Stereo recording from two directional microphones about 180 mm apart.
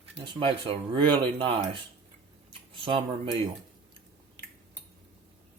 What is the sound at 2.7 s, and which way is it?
Speech, 30° right (ahead or behind).